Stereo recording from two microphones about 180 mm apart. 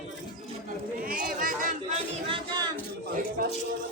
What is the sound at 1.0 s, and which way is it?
Speech, 50° right (ahead or behind).